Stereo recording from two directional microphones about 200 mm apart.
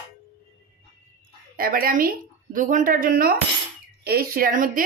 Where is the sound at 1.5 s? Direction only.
45° right (ahead or behind).